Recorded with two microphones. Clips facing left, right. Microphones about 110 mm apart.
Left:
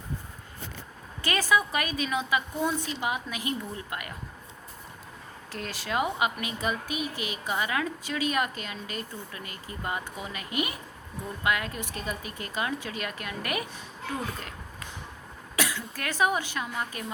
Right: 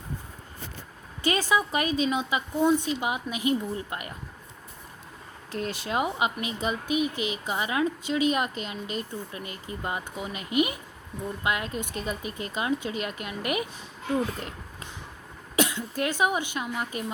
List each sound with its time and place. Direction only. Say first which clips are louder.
1.2 s speech: right 1 dB; 20° right (ahead or behind)
5.5 s speech: right 3 dB; 20° right (ahead or behind)
15.5 s speech: right 5 dB; 20° right (ahead or behind)